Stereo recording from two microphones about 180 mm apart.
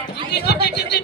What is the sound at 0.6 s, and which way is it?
Speech, 65° left (ahead or behind).